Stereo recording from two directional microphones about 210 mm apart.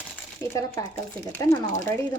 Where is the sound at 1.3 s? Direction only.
15° left (ahead or behind).